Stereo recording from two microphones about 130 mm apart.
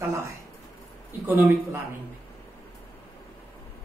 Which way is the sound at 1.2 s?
15° right (ahead or behind).